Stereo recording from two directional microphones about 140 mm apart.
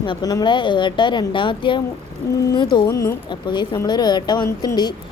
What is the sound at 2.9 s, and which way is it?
Speech, 20° left (ahead or behind).